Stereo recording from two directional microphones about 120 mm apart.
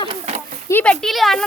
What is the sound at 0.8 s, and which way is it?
Speech, 5° left (ahead or behind).